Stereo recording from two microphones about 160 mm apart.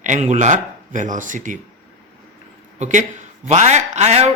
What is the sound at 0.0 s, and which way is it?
Speech, 50° right (ahead or behind).